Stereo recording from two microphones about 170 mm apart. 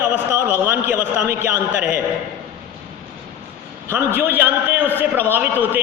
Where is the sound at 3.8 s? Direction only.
15° right (ahead or behind).